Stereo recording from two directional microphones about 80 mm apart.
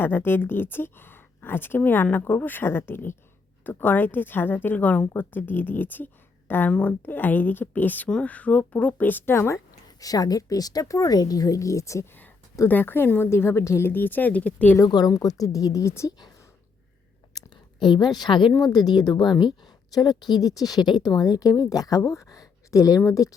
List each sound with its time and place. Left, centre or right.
0.0 s speech: left
10.0 s speech: left
12.6 s speech: left
14.8 s speech: left
15.1 s speech: left
17.7 s a woman's voice: left
18.5 s speech: left
21.2 s speech: left